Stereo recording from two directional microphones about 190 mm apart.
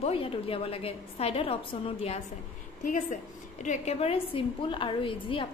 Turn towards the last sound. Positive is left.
turn(degrees=25)  # may be behind; listen again after turning